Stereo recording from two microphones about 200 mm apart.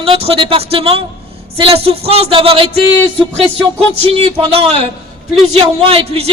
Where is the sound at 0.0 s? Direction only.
30° right (ahead or behind).